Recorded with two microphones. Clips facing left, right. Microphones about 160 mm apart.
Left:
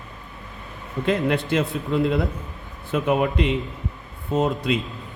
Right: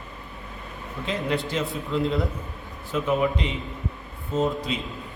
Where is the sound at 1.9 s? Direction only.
65° left (ahead or behind).